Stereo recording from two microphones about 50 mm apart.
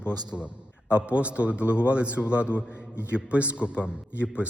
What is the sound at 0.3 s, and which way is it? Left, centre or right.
A man's voice, right.